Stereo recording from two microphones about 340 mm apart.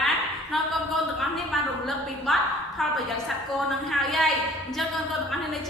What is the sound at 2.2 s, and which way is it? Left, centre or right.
A woman's voice, centre.